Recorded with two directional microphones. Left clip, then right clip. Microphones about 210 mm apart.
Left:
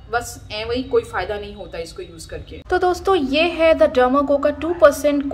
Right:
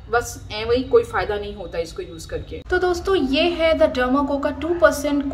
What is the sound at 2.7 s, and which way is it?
Speech, 15° left (ahead or behind).